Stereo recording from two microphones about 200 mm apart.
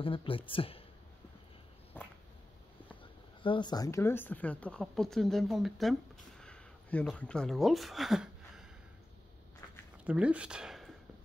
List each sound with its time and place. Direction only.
0.0 s speech: 25° left (ahead or behind)
2.0 s a sound: 10° left (ahead or behind)
3.0 s speech: 25° left (ahead or behind); by 8.6 s centre (ahead or behind)
10.0 s speech: 5° right (ahead or behind)